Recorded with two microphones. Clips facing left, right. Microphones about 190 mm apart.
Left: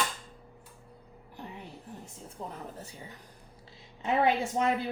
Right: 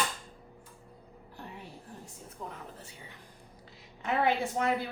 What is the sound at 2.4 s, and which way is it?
Speech, 30° left (ahead or behind).